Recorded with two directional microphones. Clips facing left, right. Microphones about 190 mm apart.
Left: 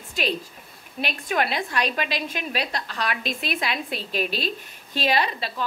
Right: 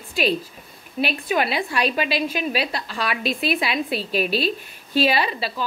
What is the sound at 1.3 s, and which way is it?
A woman's voice, 5° right (ahead or behind).